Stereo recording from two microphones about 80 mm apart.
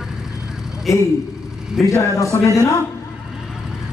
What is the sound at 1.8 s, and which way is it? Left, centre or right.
A man's voice, left.